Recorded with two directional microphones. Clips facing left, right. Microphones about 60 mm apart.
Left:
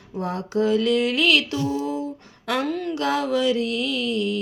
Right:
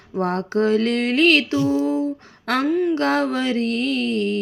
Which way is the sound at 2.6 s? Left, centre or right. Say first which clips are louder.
Right 7 dB; centre.